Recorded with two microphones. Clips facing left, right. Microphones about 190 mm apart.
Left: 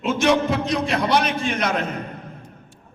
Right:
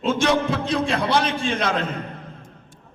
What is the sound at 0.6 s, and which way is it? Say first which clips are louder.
A man's voice: even; 30° right (ahead or behind).